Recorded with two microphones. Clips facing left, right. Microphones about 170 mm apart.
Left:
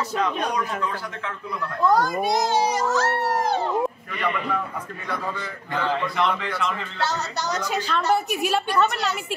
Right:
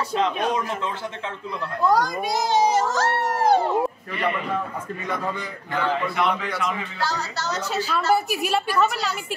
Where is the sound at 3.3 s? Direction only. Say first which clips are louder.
Right 4 dB; 30° right (ahead or behind).